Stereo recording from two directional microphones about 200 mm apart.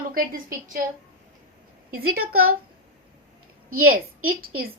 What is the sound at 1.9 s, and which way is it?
Speech, 50° right (ahead or behind).